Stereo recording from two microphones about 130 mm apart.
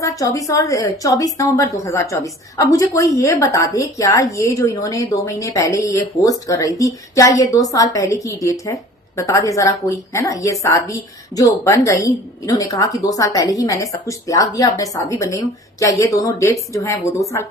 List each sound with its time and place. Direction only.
0.0 s a woman's voice: 25° left (ahead or behind)